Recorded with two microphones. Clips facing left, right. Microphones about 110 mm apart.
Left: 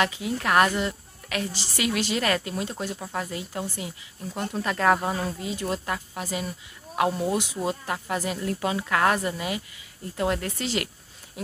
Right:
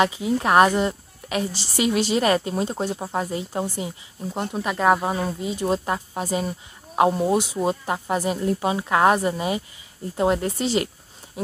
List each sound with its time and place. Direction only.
0.0 s speech: 25° right (ahead or behind)